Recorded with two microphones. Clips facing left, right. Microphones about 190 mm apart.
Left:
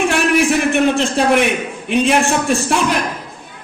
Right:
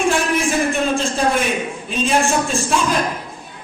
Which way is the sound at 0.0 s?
70° left (ahead or behind).